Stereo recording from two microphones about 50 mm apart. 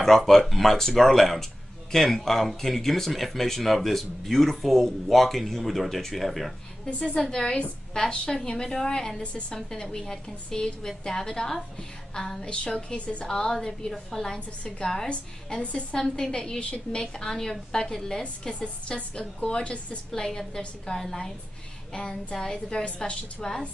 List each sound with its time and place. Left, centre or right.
0.0 s speech: centre
7.0 s a woman's voice: centre
15.6 s a woman's voice: left
16.0 s a woman's voice: centre
18.5 s a woman's voice: left
20.1 s a woman's voice: centre